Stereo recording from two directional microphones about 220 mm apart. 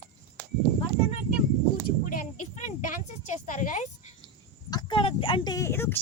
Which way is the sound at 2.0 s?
35° left (ahead or behind).